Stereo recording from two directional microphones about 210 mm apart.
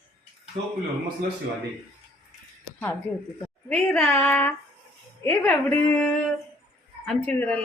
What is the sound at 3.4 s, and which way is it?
A woman's voice, 5° left (ahead or behind).